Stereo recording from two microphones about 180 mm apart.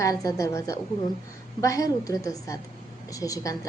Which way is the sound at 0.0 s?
20° left (ahead or behind).